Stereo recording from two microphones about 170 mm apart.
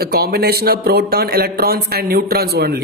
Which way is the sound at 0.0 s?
65° right (ahead or behind).